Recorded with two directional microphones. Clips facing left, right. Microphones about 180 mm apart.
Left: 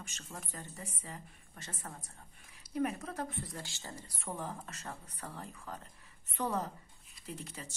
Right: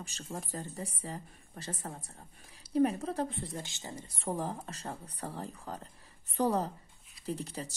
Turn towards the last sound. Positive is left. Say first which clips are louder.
# right 8 dB
turn(degrees=-35)  # may be behind; listen again after turning